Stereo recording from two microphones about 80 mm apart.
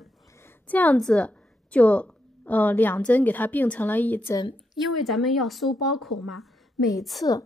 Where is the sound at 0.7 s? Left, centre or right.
Centre.